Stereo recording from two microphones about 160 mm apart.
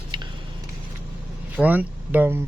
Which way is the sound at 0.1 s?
30° right (ahead or behind).